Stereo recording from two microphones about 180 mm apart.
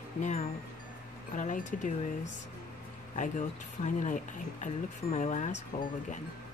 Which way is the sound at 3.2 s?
45° left (ahead or behind).